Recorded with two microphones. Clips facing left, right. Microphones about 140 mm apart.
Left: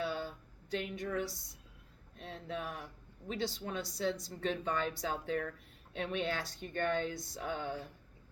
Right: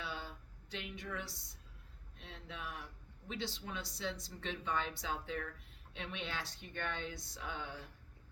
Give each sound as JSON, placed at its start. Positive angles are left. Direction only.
{"t": 0.0, "sound": "a sound", "side_deg": 45}
{"t": 1.3, "sound": "a woman's voice", "side_deg": 15}
{"t": 2.1, "sound": "speech", "side_deg": 40}